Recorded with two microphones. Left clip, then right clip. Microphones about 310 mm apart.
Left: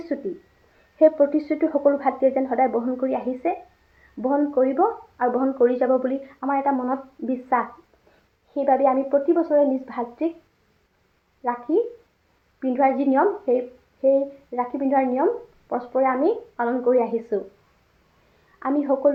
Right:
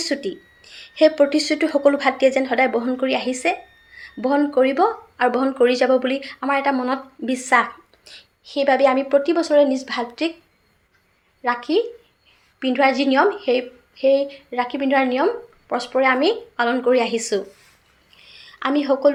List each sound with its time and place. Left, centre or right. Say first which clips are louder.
0.1 s speech: right 3 dB; right
12.5 s a woman's voice: right 3 dB; right
18.6 s speech: right 3 dB; right